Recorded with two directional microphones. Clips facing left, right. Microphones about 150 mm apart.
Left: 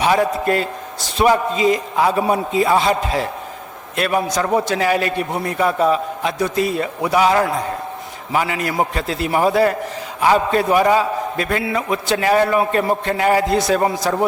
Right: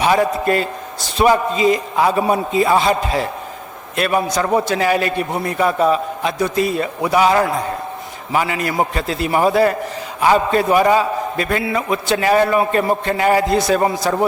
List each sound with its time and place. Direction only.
0.0 s a man's voice: 15° right (ahead or behind)